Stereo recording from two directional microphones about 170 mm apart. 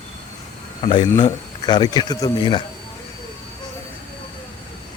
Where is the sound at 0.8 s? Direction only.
30° left (ahead or behind).